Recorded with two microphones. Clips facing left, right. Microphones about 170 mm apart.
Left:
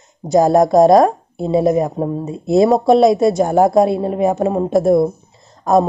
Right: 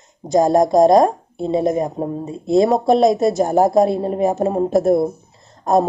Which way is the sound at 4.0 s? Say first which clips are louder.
Left 2 dB; 35° right (ahead or behind).